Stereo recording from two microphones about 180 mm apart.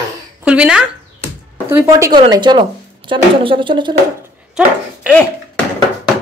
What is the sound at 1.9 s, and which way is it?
Speech, 20° right (ahead or behind).